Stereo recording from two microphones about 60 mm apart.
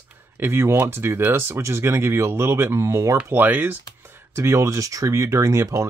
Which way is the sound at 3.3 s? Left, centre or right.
Right.